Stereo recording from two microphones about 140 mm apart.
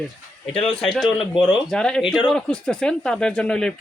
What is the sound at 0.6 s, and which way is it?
Speech, centre (ahead or behind).